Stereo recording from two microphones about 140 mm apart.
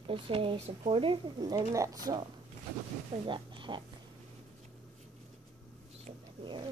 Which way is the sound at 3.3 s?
35° right (ahead or behind).